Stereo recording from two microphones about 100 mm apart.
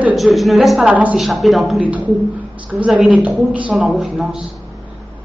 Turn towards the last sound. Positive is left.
turn(degrees=-5)  # may be behind; listen again after turning